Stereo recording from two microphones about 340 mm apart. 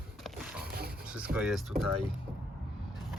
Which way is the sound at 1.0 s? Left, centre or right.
Centre.